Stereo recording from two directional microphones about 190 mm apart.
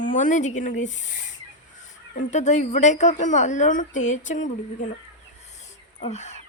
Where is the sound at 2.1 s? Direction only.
40° left (ahead or behind).